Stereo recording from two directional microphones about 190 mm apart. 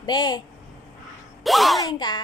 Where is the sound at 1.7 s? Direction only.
20° left (ahead or behind).